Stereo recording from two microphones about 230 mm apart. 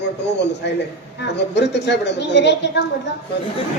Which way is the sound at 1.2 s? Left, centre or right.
Left.